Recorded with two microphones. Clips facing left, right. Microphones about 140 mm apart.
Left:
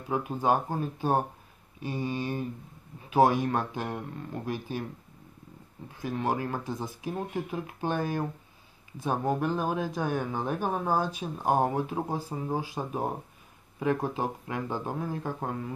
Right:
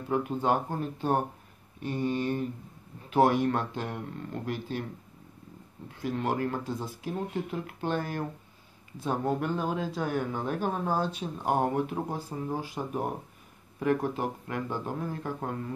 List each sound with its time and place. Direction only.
0.1 s speech: 10° left (ahead or behind)
6.0 s speech: 15° left (ahead or behind)